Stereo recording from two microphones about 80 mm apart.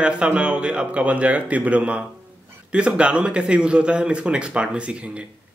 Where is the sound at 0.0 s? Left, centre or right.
Centre.